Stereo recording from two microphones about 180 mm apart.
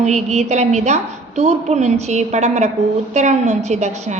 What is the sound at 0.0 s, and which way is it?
A woman's voice, 40° right (ahead or behind).